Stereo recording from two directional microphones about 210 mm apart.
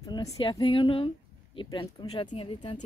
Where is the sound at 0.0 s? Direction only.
15° left (ahead or behind).